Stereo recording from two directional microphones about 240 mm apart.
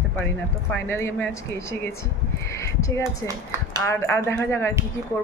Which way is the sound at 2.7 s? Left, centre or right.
Centre.